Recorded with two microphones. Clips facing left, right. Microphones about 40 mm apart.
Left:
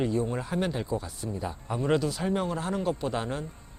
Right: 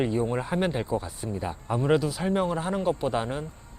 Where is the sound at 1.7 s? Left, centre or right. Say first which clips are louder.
Right 3 dB; centre.